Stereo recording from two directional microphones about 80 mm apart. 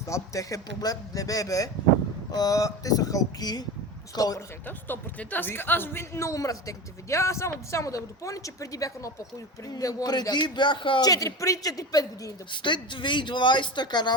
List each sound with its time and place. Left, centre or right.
0.1 s speech: left
4.6 s a man's voice: left
11.0 s speech: left
12.5 s speech: left